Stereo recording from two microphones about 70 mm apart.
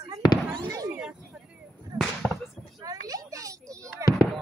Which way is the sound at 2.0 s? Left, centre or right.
Centre.